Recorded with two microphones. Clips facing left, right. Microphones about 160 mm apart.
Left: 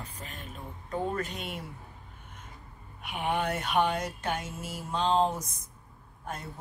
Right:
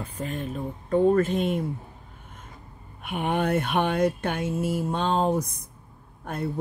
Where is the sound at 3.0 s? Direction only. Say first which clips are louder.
Right 4 dB; 50° right (ahead or behind).